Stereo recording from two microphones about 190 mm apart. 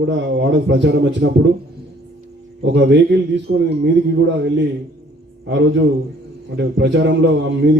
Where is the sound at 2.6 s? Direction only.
70° right (ahead or behind).